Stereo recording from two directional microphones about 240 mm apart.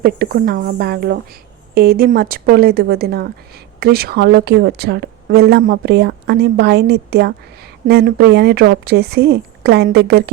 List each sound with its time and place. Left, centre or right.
0.0 s a woman's voice: right